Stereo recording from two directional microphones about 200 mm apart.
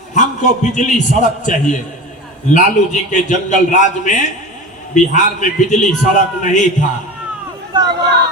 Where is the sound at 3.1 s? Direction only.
40° left (ahead or behind).